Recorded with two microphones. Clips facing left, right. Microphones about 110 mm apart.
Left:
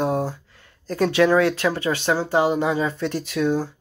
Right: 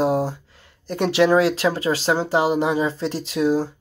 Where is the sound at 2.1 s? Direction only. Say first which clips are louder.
Even; 20° right (ahead or behind).